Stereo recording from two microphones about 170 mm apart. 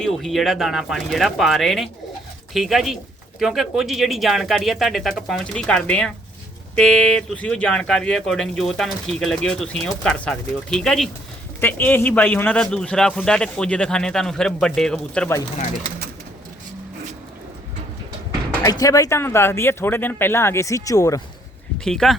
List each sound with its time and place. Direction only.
0.0 s speech: centre (ahead or behind)
18.6 s speech: 20° left (ahead or behind)
21.8 s speech: 5° left (ahead or behind)